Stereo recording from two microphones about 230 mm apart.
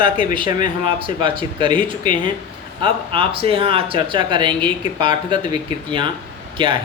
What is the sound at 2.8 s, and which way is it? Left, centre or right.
Speech, right.